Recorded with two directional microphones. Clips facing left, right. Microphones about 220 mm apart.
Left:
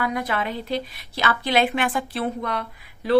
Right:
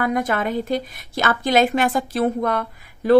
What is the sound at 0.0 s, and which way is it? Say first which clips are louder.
A woman's voice: right 4 dB; 50° right (ahead or behind).